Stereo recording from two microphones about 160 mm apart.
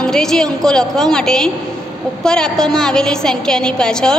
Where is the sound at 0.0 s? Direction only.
5° left (ahead or behind).